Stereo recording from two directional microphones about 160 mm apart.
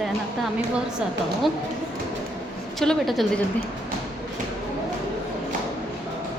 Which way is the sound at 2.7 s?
Centre (ahead or behind).